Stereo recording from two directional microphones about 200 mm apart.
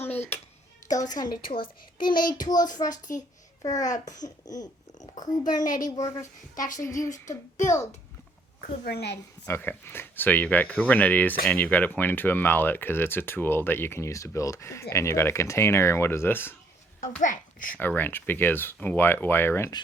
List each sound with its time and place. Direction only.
0.0 s a sound: 10° left (ahead or behind)
1.1 s a woman's voice: 20° left (ahead or behind)
3.0 s a child's voice: 40° left (ahead or behind)
3.6 s speech: 20° left (ahead or behind)
3.8 s a child's voice: 40° left (ahead or behind)
4.1 s a woman's voice: 20° left (ahead or behind)
8.6 s a woman's voice: 50° left (ahead or behind)
9.5 s speech: 10° left (ahead or behind)
17.2 s a child's voice: 40° left (ahead or behind)
17.7 s speech: 10° left (ahead or behind)